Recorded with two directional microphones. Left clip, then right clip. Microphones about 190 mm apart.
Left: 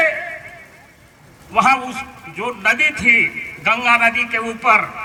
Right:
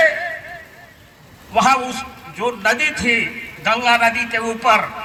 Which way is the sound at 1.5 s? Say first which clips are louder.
Even; 15° right (ahead or behind).